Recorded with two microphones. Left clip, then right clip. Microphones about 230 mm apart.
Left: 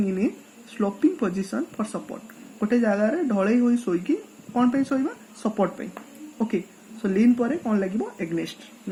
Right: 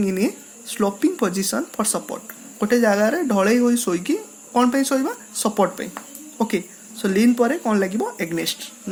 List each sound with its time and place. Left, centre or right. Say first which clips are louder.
0.0 s speech: right 4 dB; right
7.0 s speech: right 4 dB; right